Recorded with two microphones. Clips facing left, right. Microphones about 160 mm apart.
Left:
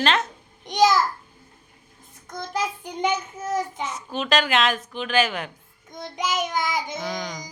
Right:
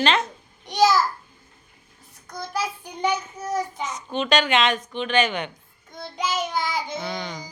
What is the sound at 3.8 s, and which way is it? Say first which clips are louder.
A child's voice: right 2 dB; 5° left (ahead or behind).